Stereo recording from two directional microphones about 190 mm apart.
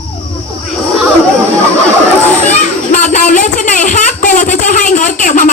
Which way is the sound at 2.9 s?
40° left (ahead or behind).